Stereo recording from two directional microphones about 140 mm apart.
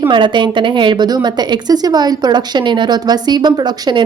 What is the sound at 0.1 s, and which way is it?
A woman's voice, 35° right (ahead or behind).